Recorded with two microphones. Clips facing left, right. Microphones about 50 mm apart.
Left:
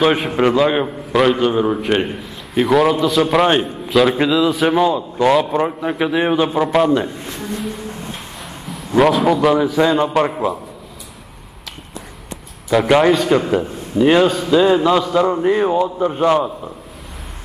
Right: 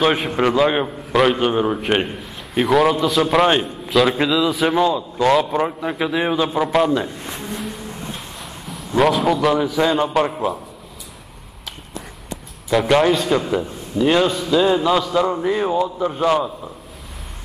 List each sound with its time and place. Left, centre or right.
0.0 s a man's voice: centre
7.4 s a sound: centre
8.6 s a man's voice: centre
12.8 s a man's voice: centre
13.5 s a man's voice: left
14.0 s a man's voice: centre